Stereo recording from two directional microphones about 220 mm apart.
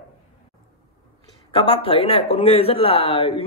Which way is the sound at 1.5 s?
25° left (ahead or behind).